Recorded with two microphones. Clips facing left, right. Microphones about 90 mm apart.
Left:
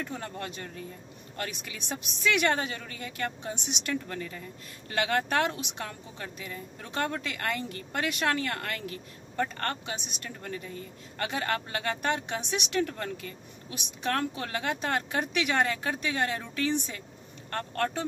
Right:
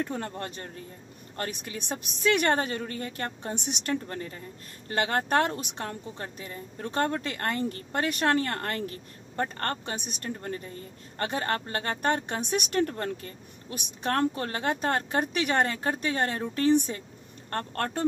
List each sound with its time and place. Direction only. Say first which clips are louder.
0.0 s speech: right 4 dB; 40° right (ahead or behind)